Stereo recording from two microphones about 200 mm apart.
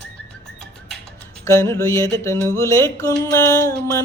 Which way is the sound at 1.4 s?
15° left (ahead or behind).